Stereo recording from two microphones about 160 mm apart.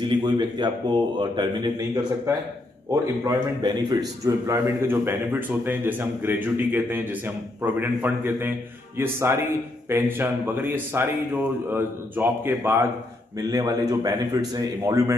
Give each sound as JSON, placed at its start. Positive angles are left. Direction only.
{"t": 0.1, "sound": "a man's voice", "side_deg": -30}